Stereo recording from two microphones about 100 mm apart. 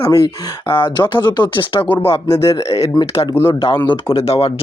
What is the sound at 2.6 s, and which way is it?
Speech, 90° left.